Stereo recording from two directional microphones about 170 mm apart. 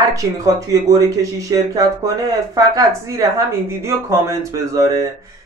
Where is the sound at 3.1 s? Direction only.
20° right (ahead or behind).